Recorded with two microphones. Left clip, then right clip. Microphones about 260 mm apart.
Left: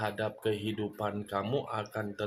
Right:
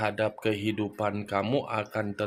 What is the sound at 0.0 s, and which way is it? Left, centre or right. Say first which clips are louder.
Speech: right 5 dB; right.